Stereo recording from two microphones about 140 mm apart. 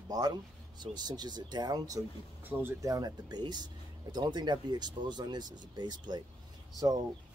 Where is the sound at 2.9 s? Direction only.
30° right (ahead or behind).